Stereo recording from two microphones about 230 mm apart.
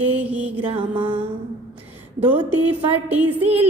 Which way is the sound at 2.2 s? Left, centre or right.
Centre.